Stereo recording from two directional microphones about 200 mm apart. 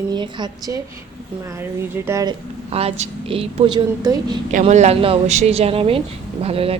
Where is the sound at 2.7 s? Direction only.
30° right (ahead or behind).